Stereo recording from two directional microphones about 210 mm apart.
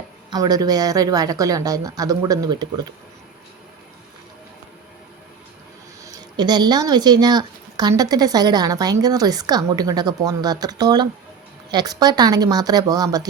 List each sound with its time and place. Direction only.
0.3 s speech: 20° right (ahead or behind)
6.3 s a woman's voice: 20° right (ahead or behind)